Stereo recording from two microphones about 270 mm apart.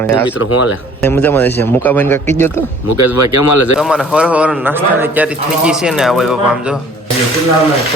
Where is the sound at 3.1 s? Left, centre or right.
Left.